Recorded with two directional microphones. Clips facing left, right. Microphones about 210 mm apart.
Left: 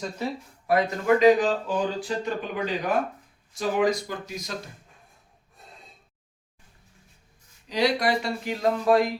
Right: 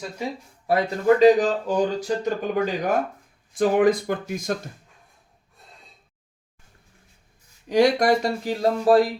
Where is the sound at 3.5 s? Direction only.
55° right (ahead or behind).